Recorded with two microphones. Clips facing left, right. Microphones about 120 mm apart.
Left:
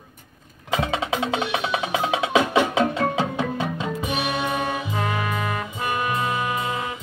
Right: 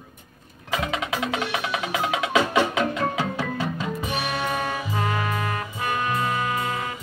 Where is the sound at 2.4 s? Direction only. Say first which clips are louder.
Left 2 dB; 15° left (ahead or behind).